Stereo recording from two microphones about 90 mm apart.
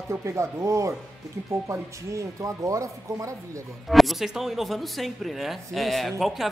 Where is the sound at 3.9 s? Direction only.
Centre (ahead or behind).